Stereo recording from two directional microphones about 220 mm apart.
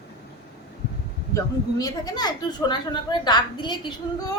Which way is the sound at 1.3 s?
15° left (ahead or behind).